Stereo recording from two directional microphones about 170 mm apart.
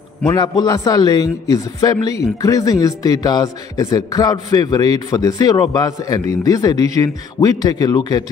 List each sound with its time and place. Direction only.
0.3 s a man's voice: 25° left (ahead or behind)